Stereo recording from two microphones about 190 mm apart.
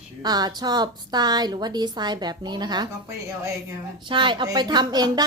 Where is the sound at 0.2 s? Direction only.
20° right (ahead or behind).